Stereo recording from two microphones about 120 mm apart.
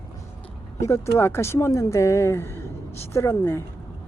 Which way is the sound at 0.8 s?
25° left (ahead or behind).